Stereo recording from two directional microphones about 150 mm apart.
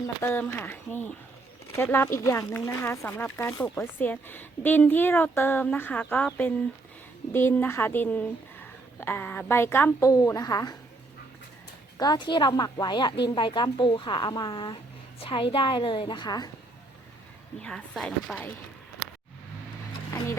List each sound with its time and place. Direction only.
0.2 s speech: 15° left (ahead or behind)
11.9 s a woman's voice: 30° left (ahead or behind)
17.6 s speech: 5° left (ahead or behind)